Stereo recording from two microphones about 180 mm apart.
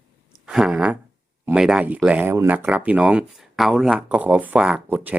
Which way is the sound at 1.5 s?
5° right (ahead or behind).